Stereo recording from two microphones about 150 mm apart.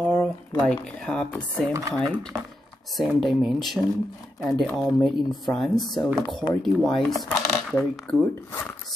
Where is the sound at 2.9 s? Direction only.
Centre (ahead or behind).